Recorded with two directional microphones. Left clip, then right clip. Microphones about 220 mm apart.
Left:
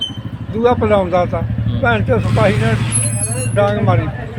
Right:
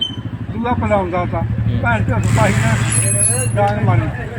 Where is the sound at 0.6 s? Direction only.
55° left (ahead or behind).